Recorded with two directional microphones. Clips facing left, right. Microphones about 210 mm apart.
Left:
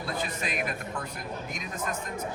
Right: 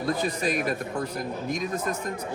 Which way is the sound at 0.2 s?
40° right (ahead or behind).